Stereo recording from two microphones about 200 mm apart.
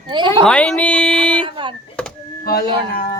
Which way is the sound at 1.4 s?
25° right (ahead or behind).